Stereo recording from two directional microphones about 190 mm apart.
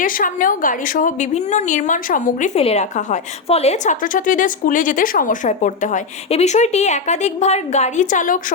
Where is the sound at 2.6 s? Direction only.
35° left (ahead or behind).